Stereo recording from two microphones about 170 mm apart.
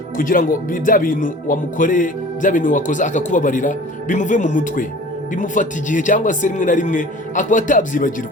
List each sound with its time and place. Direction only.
0.2 s speech: 55° left (ahead or behind)